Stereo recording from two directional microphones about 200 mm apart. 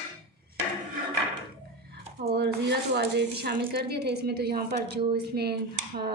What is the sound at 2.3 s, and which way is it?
Speech, 55° right (ahead or behind).